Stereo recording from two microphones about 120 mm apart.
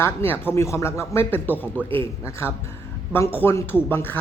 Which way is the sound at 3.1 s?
15° left (ahead or behind).